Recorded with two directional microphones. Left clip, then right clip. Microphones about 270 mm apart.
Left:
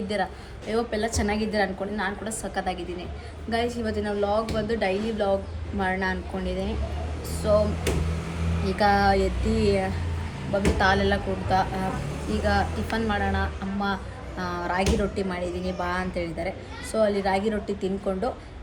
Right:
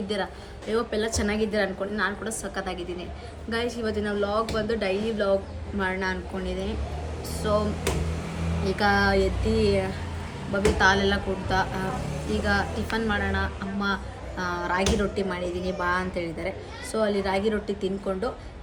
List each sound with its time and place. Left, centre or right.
0.7 s a woman's voice: centre
8.6 s a woman's voice: centre